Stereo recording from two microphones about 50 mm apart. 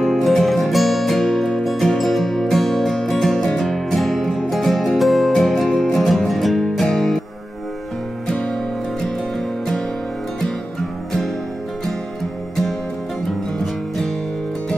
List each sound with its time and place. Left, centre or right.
0.0 s music: centre
8.3 s music: centre
10.4 s music: centre